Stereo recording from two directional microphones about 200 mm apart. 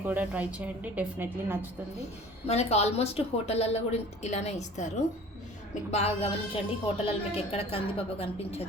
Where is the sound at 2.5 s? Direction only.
30° left (ahead or behind).